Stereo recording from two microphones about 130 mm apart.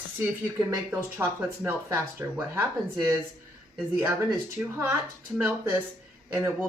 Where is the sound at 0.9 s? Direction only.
15° right (ahead or behind).